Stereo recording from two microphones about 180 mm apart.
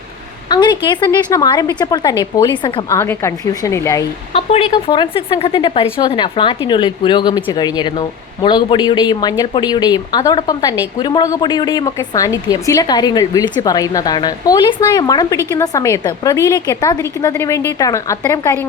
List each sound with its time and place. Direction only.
0.4 s a woman's voice: 25° left (ahead or behind)
2.9 s a woman's voice: 15° left (ahead or behind)
4.3 s a woman's voice: 35° left (ahead or behind); by 18.7 s 15° left (ahead or behind)